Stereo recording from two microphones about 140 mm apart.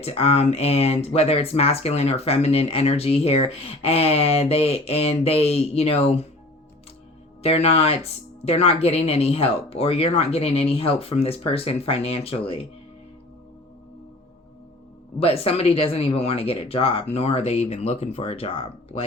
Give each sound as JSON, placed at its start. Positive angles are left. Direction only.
{"t": 0.0, "sound": "speech", "side_deg": 45}
{"t": 7.4, "sound": "speech", "side_deg": 45}
{"t": 15.2, "sound": "speech", "side_deg": 45}